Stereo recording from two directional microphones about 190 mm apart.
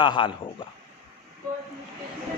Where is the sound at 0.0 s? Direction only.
25° left (ahead or behind).